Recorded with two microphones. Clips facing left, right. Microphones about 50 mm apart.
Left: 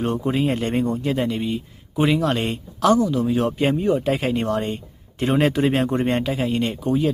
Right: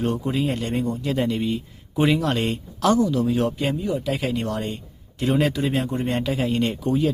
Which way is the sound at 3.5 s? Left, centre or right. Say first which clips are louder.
Left 5 dB; left.